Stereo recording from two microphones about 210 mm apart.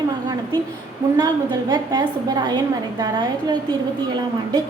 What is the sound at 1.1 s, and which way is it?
A woman's voice, 15° right (ahead or behind).